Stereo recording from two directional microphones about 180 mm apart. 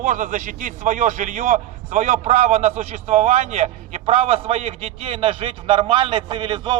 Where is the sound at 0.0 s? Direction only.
45° right (ahead or behind).